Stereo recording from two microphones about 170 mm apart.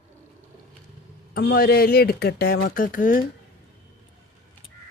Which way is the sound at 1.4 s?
65° left (ahead or behind).